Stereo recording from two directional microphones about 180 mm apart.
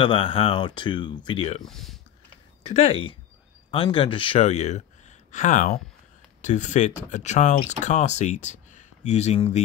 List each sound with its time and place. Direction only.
0.0 s speech: 30° left (ahead or behind)
1.6 s speech: centre (ahead or behind)
2.6 s speech: 35° left (ahead or behind)